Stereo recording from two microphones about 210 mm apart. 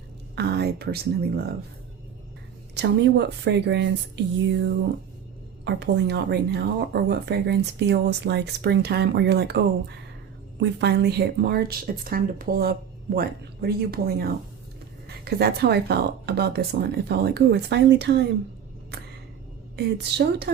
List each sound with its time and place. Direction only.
0.3 s speech: 50° right (ahead or behind)
2.7 s speech: 55° right (ahead or behind)
19.7 s speech: 50° right (ahead or behind)